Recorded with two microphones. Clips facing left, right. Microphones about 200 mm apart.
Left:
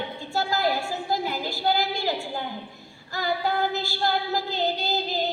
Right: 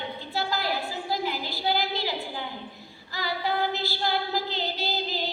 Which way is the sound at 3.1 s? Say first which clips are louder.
Left 3 dB; 45° left (ahead or behind).